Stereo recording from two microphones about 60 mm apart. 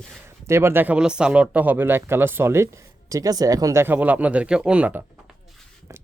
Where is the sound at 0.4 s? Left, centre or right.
Right.